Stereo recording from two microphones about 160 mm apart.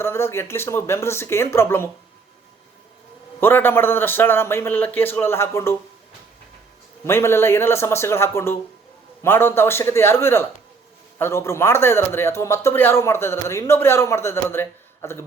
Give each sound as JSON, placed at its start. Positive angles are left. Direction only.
{"t": 0.0, "sound": "speech", "side_deg": 15}
{"t": 3.4, "sound": "speech", "side_deg": 15}
{"t": 7.0, "sound": "speech", "side_deg": 15}